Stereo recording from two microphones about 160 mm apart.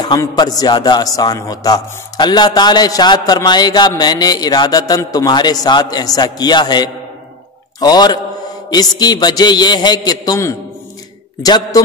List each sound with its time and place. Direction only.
0.0 s a man's voice: 25° left (ahead or behind)